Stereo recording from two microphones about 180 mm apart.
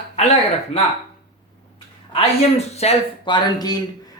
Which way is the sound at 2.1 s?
35° left (ahead or behind).